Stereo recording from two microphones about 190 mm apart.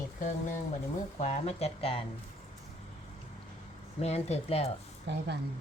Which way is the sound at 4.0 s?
35° left (ahead or behind).